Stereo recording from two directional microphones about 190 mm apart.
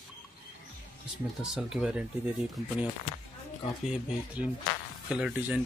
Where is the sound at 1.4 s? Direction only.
Centre (ahead or behind).